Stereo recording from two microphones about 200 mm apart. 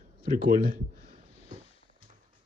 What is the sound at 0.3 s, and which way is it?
Speech, 45° right (ahead or behind).